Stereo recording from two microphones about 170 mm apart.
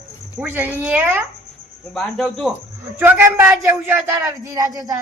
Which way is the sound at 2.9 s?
10° right (ahead or behind).